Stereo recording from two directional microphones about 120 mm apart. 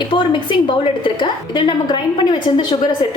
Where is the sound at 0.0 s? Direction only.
40° left (ahead or behind).